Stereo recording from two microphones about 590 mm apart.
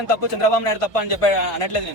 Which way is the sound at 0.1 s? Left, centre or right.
Left.